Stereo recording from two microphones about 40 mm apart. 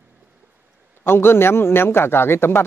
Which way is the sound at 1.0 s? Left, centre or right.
Left.